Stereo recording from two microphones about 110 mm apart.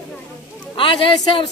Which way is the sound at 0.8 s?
50° left (ahead or behind).